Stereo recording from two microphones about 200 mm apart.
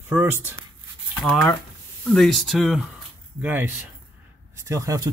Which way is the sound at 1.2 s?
Centre (ahead or behind).